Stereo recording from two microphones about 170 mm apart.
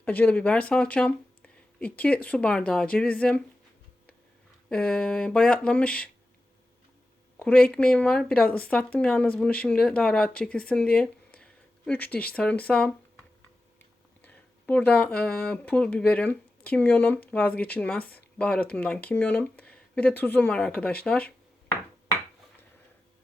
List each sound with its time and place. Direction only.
0.0 s speech: 10° left (ahead or behind)
4.7 s speech: 5° left (ahead or behind)
7.3 s speech: 5° left (ahead or behind)